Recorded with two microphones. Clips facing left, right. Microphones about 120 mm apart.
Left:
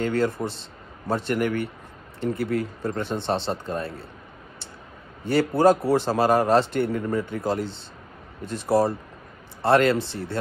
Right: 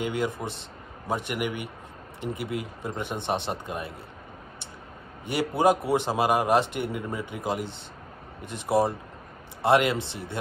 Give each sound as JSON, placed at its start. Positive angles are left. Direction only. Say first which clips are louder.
{"t": 0.0, "sound": "a man's voice", "louder": "left 5 dB", "side_deg": -15}
{"t": 5.2, "sound": "a man's voice", "louder": "left 4 dB", "side_deg": -20}